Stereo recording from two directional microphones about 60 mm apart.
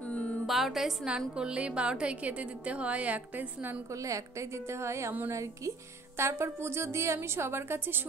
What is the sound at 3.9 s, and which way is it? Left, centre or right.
A woman's voice, right.